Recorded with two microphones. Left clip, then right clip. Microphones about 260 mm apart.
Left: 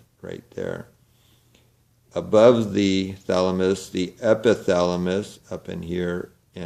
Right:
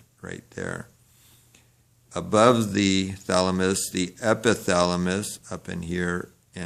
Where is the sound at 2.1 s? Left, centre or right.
Right.